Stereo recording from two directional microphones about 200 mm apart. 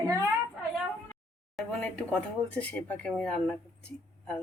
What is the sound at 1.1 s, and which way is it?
A woman's voice, 5° left (ahead or behind).